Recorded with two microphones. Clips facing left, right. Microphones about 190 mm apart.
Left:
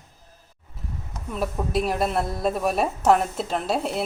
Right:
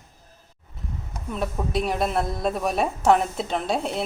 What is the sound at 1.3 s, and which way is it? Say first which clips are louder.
A woman's voice: left 1 dB; centre (ahead or behind).